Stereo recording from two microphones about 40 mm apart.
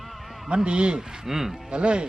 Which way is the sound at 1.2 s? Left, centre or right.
Centre.